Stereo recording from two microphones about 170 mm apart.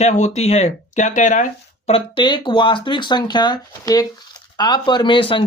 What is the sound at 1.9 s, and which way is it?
Speech, 30° left (ahead or behind).